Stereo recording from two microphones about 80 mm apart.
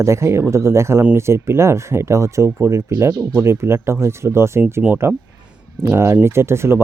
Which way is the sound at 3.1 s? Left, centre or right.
Right.